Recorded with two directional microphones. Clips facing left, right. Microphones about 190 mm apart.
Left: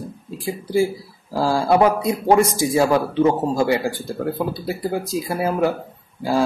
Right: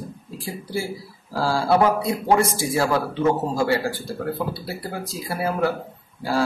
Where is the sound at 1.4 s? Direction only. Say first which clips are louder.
Left 3 dB; 15° left (ahead or behind).